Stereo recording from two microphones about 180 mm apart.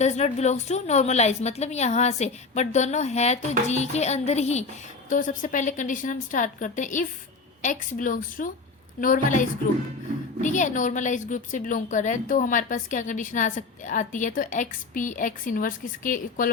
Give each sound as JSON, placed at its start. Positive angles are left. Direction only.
{"t": 0.0, "sound": "a woman's voice", "side_deg": 40}